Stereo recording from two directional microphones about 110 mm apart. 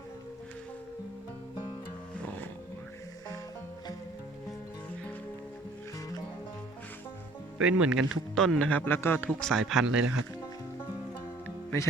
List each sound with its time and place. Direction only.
7.6 s speech: 10° right (ahead or behind)
8.4 s speech: 5° left (ahead or behind)
9.4 s speech: centre (ahead or behind)
11.4 s music: 25° left (ahead or behind)